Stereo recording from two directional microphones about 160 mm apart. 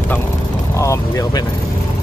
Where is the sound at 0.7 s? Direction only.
20° left (ahead or behind).